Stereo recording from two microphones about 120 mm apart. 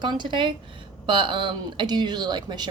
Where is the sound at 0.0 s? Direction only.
40° right (ahead or behind).